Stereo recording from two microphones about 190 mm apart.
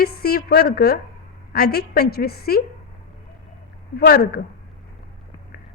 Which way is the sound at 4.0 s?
55° left (ahead or behind).